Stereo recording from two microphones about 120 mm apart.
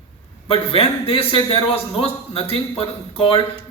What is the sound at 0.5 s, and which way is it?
A man's voice, 50° left (ahead or behind).